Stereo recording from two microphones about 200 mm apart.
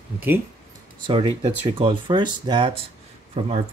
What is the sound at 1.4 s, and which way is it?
Speech, 25° right (ahead or behind).